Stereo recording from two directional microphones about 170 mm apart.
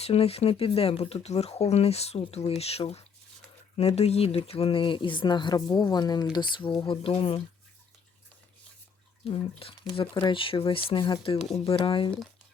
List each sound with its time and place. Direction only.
0.0 s speech: 35° left (ahead or behind)
9.2 s speech: 35° left (ahead or behind)
11.3 s speech: centre (ahead or behind)
11.6 s speech: 30° left (ahead or behind)